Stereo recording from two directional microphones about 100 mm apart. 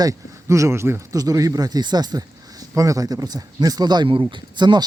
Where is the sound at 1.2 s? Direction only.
35° right (ahead or behind).